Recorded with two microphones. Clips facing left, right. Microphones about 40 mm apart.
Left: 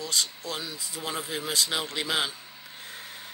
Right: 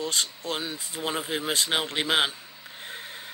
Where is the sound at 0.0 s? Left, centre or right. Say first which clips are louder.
Right 2 dB; right.